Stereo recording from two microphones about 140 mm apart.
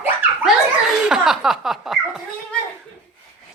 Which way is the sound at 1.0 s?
5° right (ahead or behind).